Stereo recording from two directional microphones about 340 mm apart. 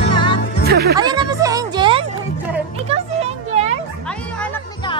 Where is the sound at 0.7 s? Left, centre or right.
Right.